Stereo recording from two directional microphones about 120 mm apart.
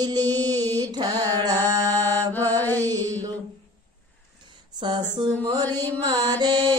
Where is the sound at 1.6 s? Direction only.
20° left (ahead or behind).